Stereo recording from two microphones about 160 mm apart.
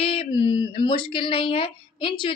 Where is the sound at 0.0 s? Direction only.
35° left (ahead or behind).